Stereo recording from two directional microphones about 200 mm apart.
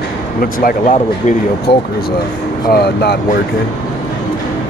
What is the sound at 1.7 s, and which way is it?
Speech, 55° left (ahead or behind).